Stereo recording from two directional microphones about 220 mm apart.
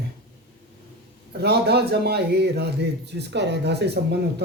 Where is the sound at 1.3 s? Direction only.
45° right (ahead or behind).